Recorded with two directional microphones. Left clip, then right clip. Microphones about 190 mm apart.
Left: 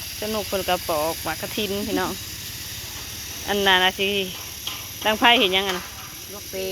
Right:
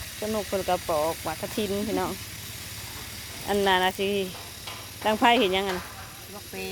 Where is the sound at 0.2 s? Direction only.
Centre (ahead or behind).